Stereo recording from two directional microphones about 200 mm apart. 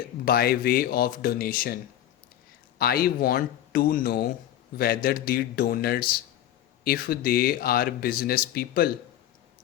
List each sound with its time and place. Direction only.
0.3 s speech: 50° left (ahead or behind)